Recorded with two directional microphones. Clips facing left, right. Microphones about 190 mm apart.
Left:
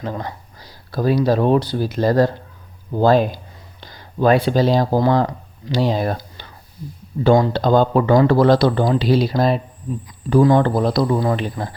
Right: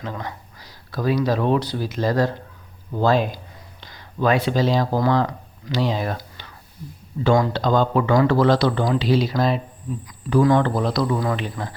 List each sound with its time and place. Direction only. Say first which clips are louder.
0.0 s speech: left 4 dB; 35° left (ahead or behind)